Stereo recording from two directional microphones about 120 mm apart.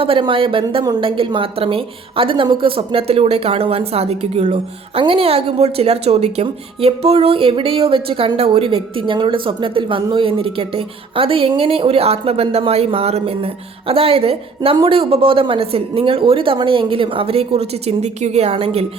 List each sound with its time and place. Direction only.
0.0 s speech: 45° right (ahead or behind); by 5.0 s 65° right (ahead or behind)
5.0 s speech: 50° right (ahead or behind); by 18.5 s 70° right (ahead or behind)
18.5 s speech: 55° right (ahead or behind)